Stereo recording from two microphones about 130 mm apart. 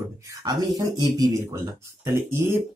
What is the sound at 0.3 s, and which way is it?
Speech, 30° right (ahead or behind).